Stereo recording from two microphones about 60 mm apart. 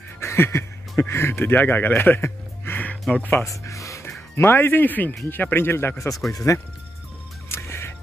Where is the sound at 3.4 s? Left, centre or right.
Left.